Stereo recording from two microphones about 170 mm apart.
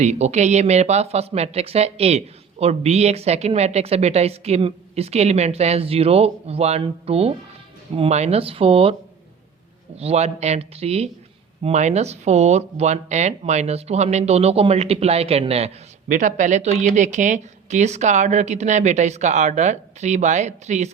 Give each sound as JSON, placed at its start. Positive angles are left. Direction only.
{"t": 0.0, "sound": "speech", "side_deg": -40}
{"t": 10.0, "sound": "speech", "side_deg": -40}
{"t": 16.0, "sound": "speech", "side_deg": -50}